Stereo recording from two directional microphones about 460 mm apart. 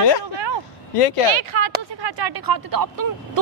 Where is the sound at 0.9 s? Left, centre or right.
Left.